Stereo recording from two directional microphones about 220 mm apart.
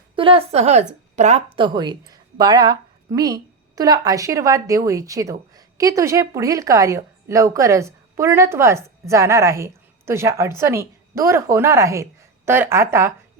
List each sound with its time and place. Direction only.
0.2 s a woman's voice: 25° right (ahead or behind)
1.5 s a woman's voice: 20° right (ahead or behind)